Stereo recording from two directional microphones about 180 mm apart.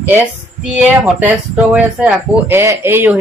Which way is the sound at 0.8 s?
5° right (ahead or behind).